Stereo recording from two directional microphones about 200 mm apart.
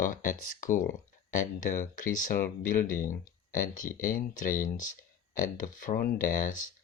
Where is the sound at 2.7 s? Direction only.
45° left (ahead or behind).